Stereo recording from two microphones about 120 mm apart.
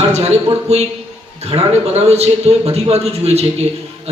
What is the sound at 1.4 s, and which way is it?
A man's voice, 60° right (ahead or behind).